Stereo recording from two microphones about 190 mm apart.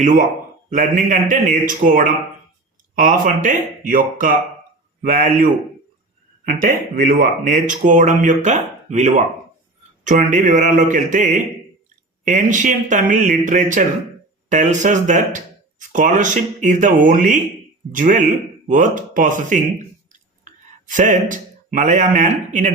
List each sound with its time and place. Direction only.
0.0 s speech: 40° right (ahead or behind)